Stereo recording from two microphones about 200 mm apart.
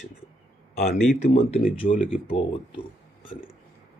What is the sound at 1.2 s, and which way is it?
Speech, 30° left (ahead or behind).